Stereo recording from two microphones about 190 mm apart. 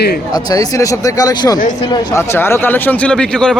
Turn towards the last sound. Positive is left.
turn(degrees=5)  # may be behind; listen again after turning